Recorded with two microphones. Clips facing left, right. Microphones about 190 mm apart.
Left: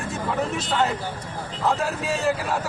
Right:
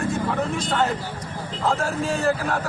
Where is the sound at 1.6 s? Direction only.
Centre (ahead or behind).